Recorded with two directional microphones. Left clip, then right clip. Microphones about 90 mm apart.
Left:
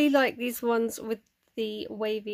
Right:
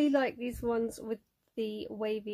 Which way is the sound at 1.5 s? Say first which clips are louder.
Left 4 dB; centre (ahead or behind).